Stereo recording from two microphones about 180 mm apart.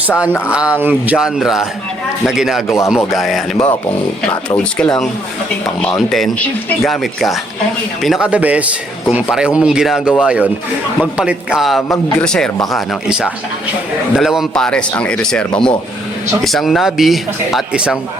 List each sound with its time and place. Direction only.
0.5 s speech: 5° right (ahead or behind)
2.6 s speech: 15° left (ahead or behind)
3.1 s a man's voice: centre (ahead or behind)